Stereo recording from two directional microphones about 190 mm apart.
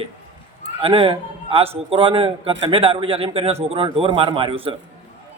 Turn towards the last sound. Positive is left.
turn(degrees=-30)  # may be behind; listen again after turning